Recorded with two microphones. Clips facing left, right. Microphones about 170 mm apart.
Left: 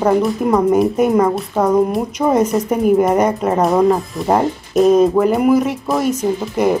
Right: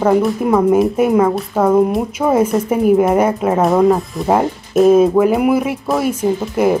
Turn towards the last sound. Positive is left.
turn(degrees=-5)  # may be behind; listen again after turning